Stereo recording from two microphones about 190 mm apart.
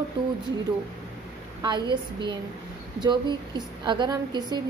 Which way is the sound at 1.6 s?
25° right (ahead or behind).